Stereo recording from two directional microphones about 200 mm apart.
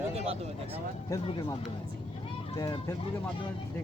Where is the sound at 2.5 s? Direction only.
20° left (ahead or behind).